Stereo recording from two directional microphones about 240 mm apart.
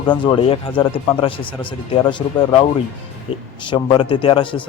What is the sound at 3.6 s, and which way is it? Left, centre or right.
Speech, left.